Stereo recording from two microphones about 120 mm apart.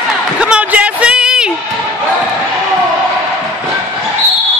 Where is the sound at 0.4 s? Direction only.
10° right (ahead or behind).